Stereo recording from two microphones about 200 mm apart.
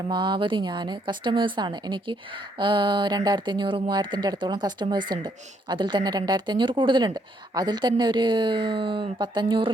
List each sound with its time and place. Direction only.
0.1 s speech: 20° right (ahead or behind)